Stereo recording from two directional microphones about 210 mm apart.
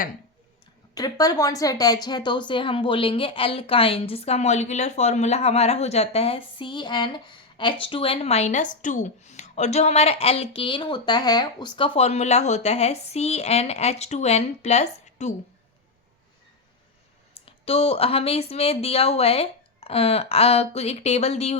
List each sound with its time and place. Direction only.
0.9 s a woman's voice: 15° left (ahead or behind)
17.3 s a woman's voice: 25° left (ahead or behind)